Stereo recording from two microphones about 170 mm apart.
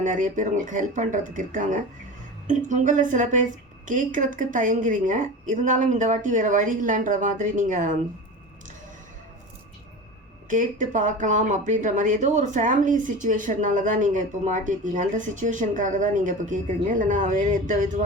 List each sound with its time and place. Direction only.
0.0 s speech: 50° right (ahead or behind)
10.5 s speech: 50° right (ahead or behind)